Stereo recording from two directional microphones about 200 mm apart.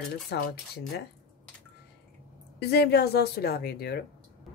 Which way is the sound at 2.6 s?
55° left (ahead or behind).